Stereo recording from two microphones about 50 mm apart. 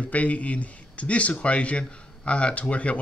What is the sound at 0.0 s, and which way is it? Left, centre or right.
Speech, left.